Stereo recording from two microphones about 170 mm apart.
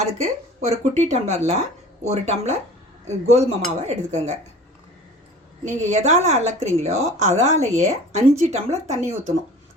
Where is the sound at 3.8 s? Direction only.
40° right (ahead or behind).